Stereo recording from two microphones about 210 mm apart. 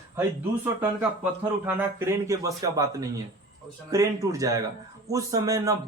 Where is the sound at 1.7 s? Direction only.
10° right (ahead or behind).